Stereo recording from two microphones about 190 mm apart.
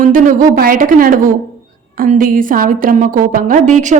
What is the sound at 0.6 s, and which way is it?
A woman's voice, 45° right (ahead or behind).